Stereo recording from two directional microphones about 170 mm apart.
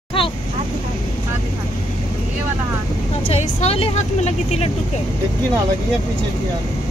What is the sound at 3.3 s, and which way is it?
A woman's voice, 35° left (ahead or behind).